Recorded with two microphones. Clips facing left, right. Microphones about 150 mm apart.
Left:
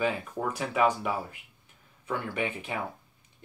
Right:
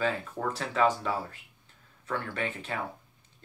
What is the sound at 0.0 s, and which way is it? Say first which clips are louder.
Speech: left 1 dB; 15° left (ahead or behind).